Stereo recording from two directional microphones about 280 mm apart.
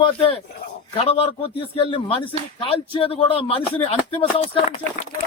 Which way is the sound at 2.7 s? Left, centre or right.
Centre.